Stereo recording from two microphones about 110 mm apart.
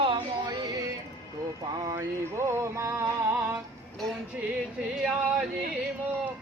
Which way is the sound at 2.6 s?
25° right (ahead or behind).